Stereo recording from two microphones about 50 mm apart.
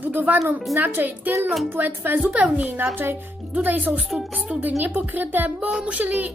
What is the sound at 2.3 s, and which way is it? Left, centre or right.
Speech, right.